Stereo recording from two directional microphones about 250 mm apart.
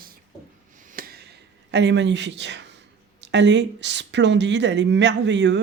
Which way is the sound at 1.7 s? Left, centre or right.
Right.